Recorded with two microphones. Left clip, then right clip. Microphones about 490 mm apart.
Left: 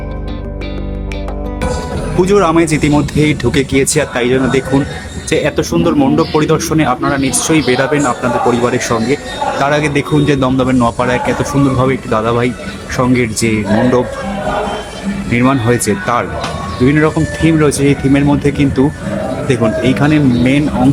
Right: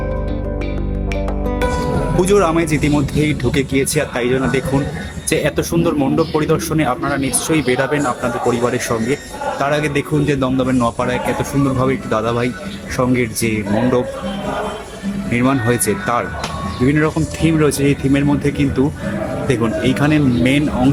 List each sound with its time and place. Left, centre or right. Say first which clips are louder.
2.1 s speech: left 5 dB; right
15.3 s speech: left 4 dB; right